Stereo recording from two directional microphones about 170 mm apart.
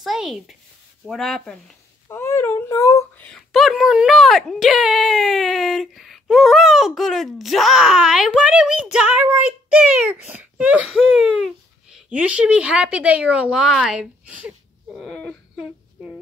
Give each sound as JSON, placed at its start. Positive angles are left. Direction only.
{"t": 0.0, "sound": "speech", "side_deg": 0}
{"t": 2.0, "sound": "speech", "side_deg": 15}
{"t": 15.0, "sound": "a sound", "side_deg": 5}